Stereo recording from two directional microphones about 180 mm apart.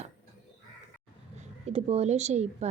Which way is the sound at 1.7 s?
35° right (ahead or behind).